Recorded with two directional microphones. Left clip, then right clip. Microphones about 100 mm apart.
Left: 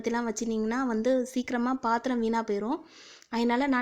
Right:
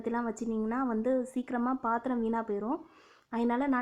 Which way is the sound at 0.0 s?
30° left (ahead or behind).